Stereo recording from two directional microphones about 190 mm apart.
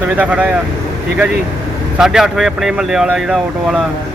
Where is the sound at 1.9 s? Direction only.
5° right (ahead or behind).